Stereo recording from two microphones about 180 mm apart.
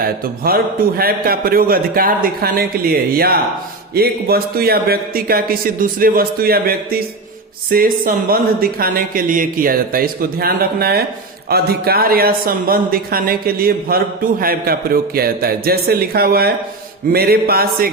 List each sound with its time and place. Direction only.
0.0 s speech: 55° right (ahead or behind)